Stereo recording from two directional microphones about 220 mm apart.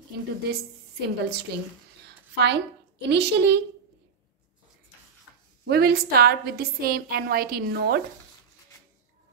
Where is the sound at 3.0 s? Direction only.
50° right (ahead or behind).